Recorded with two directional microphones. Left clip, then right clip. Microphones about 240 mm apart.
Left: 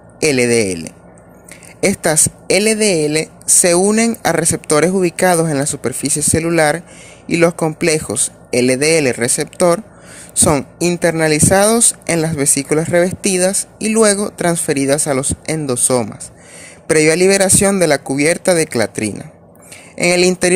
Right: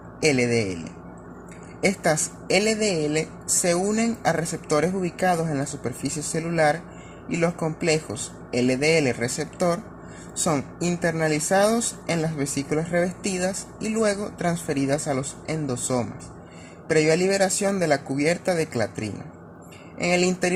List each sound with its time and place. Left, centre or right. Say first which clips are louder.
0.2 s speech: left 8 dB; left